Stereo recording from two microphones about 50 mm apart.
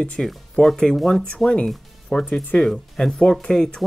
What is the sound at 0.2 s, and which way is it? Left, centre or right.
Speech, centre.